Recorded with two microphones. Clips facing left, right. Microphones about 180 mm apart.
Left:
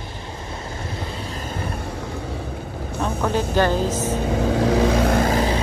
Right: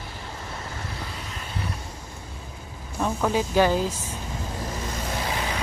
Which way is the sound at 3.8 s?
70° left (ahead or behind).